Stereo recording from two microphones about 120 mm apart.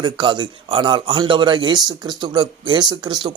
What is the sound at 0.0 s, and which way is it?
A man's voice, 40° right (ahead or behind).